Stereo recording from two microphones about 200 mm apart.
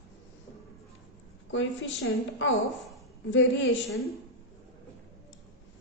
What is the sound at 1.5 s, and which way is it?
A woman's voice, 70° left (ahead or behind).